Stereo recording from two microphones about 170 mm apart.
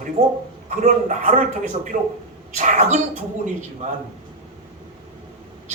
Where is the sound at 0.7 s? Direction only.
50° right (ahead or behind).